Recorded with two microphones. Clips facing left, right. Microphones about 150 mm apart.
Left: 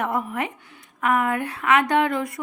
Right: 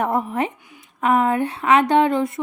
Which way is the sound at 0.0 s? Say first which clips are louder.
Right 4 dB; 35° right (ahead or behind).